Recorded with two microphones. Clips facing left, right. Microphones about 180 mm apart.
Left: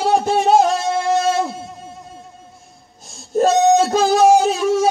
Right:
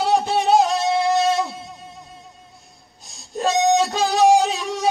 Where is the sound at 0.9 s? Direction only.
45° left (ahead or behind).